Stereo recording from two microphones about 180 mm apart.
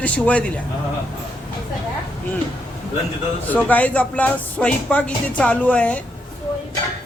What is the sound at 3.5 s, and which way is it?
Speech, 10° left (ahead or behind).